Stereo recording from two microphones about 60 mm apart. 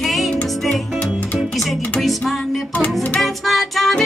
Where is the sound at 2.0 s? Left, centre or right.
Centre.